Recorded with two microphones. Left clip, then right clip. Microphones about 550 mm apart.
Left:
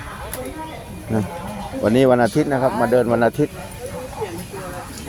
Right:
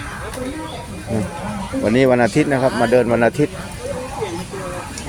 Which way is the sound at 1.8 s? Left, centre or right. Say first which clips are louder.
Even; left.